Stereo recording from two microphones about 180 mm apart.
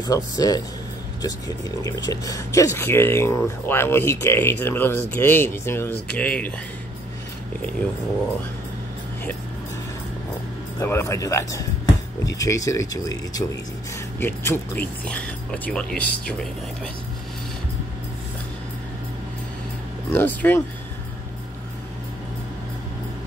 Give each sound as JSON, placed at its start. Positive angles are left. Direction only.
{"t": 0.0, "sound": "speech", "side_deg": 20}
{"t": 10.8, "sound": "speech", "side_deg": 15}
{"t": 20.1, "sound": "speech", "side_deg": 10}